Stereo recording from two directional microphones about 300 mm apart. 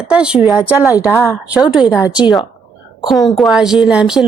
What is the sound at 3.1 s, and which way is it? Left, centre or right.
A woman's voice, centre.